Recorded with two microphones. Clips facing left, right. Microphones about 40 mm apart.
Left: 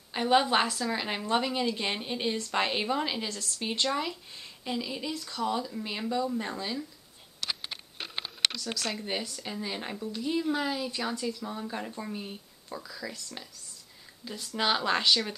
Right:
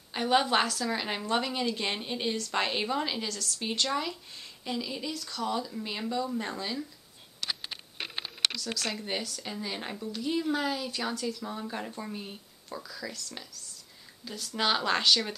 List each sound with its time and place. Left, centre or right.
0.1 s a woman's voice: centre
3.3 s speech: centre
3.9 s speech: centre
5.1 s a woman's voice: centre
8.5 s a woman's voice: centre
14.2 s speech: centre
14.6 s a woman's voice: centre